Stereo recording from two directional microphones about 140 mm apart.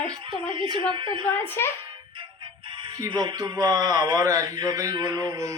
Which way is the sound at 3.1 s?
30° right (ahead or behind).